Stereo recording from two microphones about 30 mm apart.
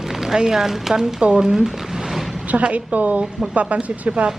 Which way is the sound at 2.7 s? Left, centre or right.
Right.